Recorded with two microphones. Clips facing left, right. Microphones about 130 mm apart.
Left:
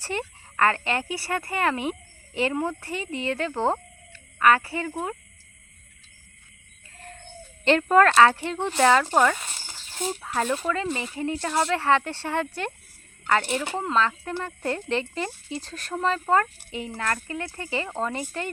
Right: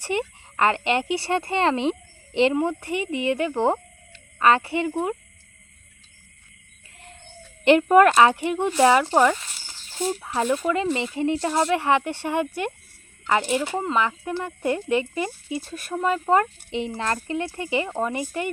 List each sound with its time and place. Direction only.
0.0 s speech: 15° right (ahead or behind)
7.6 s speech: 15° right (ahead or behind)